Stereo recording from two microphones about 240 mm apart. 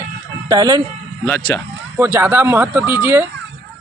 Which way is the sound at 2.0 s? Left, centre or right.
Centre.